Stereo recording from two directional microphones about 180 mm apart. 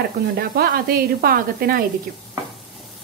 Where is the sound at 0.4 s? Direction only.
55° right (ahead or behind).